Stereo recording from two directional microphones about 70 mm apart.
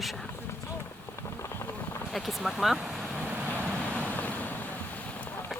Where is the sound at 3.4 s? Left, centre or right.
Right.